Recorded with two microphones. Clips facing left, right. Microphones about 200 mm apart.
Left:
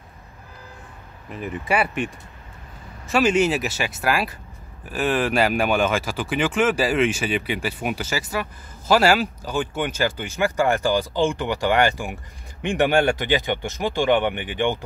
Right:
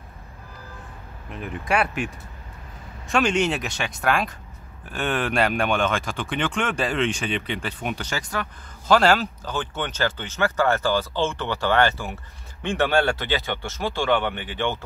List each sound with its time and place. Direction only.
1.3 s speech: centre (ahead or behind)